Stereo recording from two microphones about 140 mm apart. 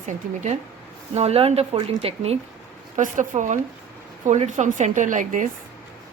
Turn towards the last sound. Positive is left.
turn(degrees=-65)  # may be behind; listen again after turning